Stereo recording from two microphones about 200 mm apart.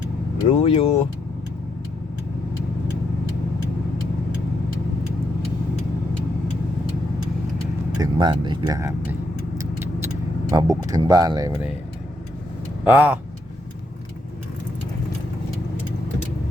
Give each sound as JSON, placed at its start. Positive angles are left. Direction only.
{"t": 0.4, "sound": "speech", "side_deg": 30}
{"t": 7.9, "sound": "speech", "side_deg": -20}
{"t": 9.6, "sound": "vehicle", "side_deg": -10}
{"t": 10.5, "sound": "speech", "side_deg": -15}
{"t": 12.8, "sound": "speech", "side_deg": -10}